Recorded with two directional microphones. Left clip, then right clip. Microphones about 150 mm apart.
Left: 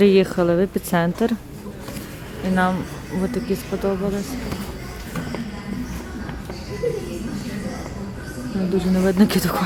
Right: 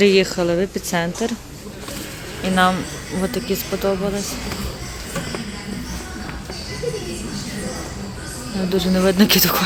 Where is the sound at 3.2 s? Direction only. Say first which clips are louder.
Right 2 dB; 5° left (ahead or behind).